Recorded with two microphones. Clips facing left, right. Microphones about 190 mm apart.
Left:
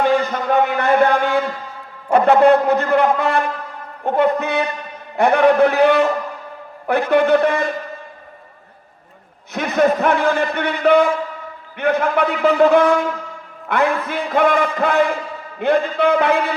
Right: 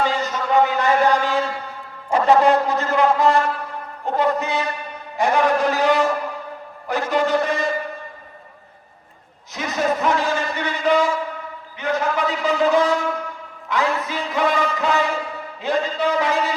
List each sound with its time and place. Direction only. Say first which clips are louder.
0.0 s a sound: left 5 dB; 55° left (ahead or behind)
4.0 s a man's voice: left 4 dB; 60° left (ahead or behind)
9.5 s a man's voice: left 6 dB; 60° left (ahead or behind)